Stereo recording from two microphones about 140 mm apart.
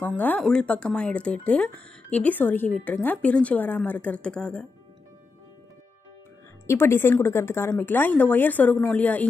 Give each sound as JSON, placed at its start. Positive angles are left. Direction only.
{"t": 0.0, "sound": "speech", "side_deg": 10}
{"t": 6.7, "sound": "speech", "side_deg": 15}